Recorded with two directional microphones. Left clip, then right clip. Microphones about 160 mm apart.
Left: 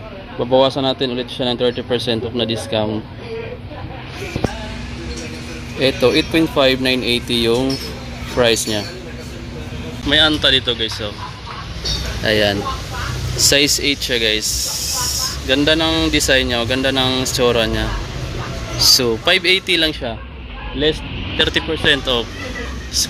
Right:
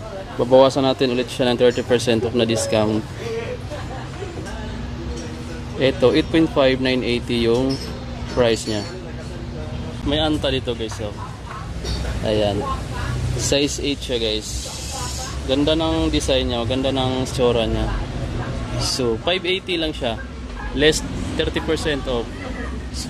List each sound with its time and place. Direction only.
0.4 s speech: 10° right (ahead or behind)
5.8 s speech: centre (ahead or behind)
10.0 s speech: 5° right (ahead or behind)
12.3 s speech: 5° left (ahead or behind)
14.9 s snake: 25° right (ahead or behind)
15.4 s speech: centre (ahead or behind)